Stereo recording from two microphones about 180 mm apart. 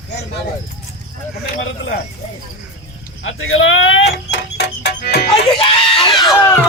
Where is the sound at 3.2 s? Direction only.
90° left; by 5.2 s 65° left (ahead or behind).